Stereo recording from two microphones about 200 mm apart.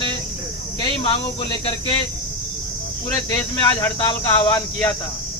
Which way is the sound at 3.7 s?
15° left (ahead or behind).